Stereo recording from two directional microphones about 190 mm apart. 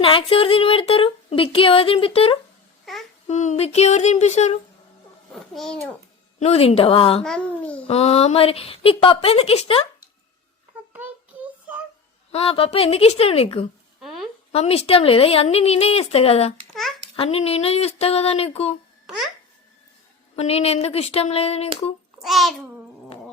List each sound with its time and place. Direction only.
0.0 s a sound: 30° left (ahead or behind)
2.9 s babbling: centre (ahead or behind)
3.2 s speech: 35° left (ahead or behind)
5.3 s a child's voice: centre (ahead or behind)
6.4 s a sound: 35° left (ahead or behind)
7.2 s a child's voice: 5° left (ahead or behind)
7.9 s speech: 30° left (ahead or behind)
12.3 s speech: 30° left (ahead or behind)
14.0 s a sound: centre (ahead or behind)
14.5 s speech: 35° left (ahead or behind)
19.0 s speech: centre (ahead or behind)
20.3 s speech: 35° left (ahead or behind)
22.2 s a child's voice: centre (ahead or behind)